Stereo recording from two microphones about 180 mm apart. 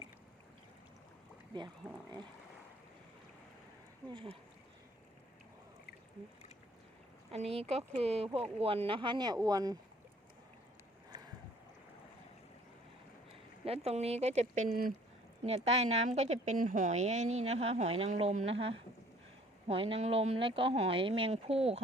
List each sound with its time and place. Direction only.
1.8 s speech: 5° right (ahead or behind)
4.1 s speech: 30° right (ahead or behind)
7.3 s a woman's voice: 35° right (ahead or behind)
13.7 s a woman's voice: 35° right (ahead or behind)